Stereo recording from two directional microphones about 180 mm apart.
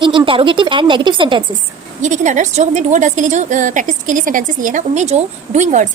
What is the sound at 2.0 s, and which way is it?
A woman's voice, 45° right (ahead or behind).